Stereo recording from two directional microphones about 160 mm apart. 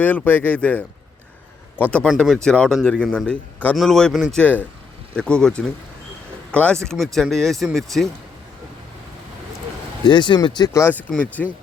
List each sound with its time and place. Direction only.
0.0 s a man's voice: 10° left (ahead or behind)
10.1 s speech: 30° left (ahead or behind)
10.7 s speech: 15° left (ahead or behind)